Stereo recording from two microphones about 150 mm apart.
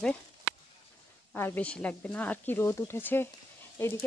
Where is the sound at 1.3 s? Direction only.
10° left (ahead or behind).